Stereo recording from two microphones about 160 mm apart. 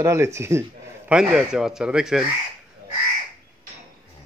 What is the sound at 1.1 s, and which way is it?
Speech, 5° right (ahead or behind).